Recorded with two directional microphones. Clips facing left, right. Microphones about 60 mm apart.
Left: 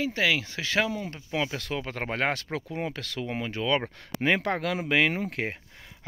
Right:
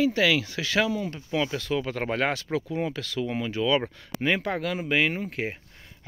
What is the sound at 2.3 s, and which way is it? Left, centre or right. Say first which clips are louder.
Speech: right 3 dB; left.